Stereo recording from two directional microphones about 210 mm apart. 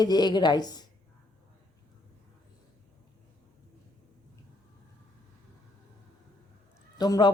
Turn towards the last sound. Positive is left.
turn(degrees=20)  # may be behind; listen again after turning